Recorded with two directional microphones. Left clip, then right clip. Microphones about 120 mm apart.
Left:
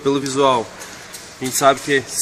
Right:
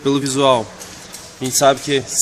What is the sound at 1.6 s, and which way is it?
Speech, 55° right (ahead or behind).